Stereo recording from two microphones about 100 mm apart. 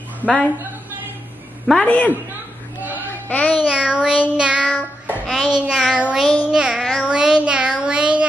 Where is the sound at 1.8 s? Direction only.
15° left (ahead or behind).